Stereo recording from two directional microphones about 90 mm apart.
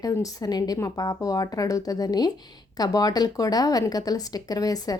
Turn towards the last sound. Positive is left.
turn(degrees=45)  # may be behind; listen again after turning